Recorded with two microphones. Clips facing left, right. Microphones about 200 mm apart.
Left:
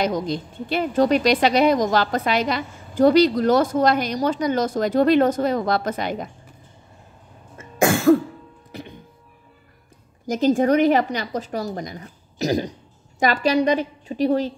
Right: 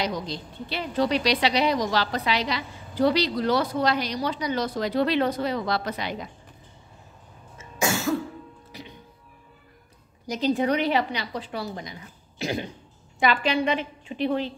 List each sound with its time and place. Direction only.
0.0 s a woman's voice: 50° left (ahead or behind)
7.5 s cough: 55° left (ahead or behind)
8.7 s music: 50° left (ahead or behind)
10.2 s a woman's voice: 50° left (ahead or behind)